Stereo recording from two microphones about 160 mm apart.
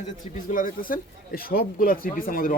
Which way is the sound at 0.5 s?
60° left (ahead or behind).